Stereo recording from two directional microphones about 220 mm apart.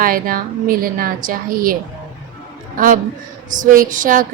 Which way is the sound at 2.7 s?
40° right (ahead or behind).